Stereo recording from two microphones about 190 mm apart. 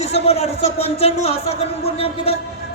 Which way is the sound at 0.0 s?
35° left (ahead or behind).